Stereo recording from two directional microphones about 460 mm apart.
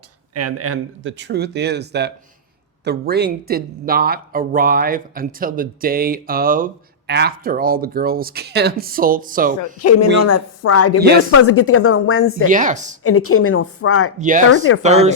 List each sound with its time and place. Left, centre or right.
0.3 s speech: right
9.8 s speech: left
12.5 s a woman's voice: centre
13.0 s speech: left
14.2 s a woman's voice: centre